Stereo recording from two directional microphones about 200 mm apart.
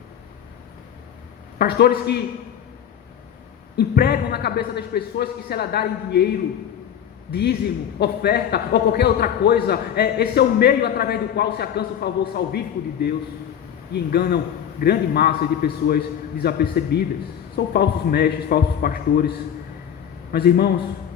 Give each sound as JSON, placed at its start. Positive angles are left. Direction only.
{"t": 1.5, "sound": "a man's voice", "side_deg": 50}
{"t": 3.8, "sound": "a man's voice", "side_deg": 50}
{"t": 7.9, "sound": "a man's voice", "side_deg": 55}
{"t": 20.3, "sound": "a man's voice", "side_deg": 50}